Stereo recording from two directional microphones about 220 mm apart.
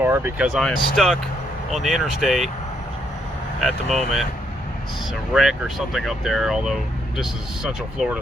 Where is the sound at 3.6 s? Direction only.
Centre (ahead or behind).